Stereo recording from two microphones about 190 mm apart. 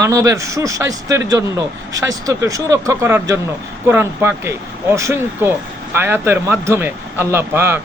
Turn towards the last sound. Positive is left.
turn(degrees=-10)  # may be behind; listen again after turning